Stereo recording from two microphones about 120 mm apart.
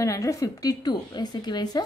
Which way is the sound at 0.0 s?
25° left (ahead or behind).